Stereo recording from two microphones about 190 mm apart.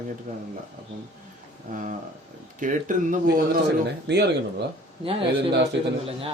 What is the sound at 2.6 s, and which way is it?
Speech, 45° right (ahead or behind).